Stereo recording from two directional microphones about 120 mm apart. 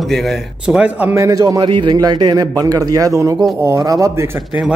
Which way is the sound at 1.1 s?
30° right (ahead or behind).